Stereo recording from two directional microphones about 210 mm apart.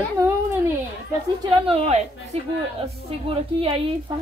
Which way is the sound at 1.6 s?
30° right (ahead or behind).